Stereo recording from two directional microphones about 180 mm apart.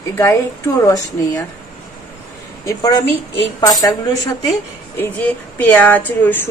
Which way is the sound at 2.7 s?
20° left (ahead or behind).